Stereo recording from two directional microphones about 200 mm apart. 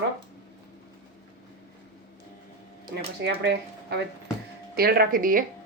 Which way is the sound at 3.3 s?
55° right (ahead or behind).